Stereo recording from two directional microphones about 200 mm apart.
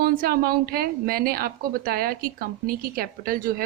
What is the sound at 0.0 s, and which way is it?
A woman's voice, 45° right (ahead or behind).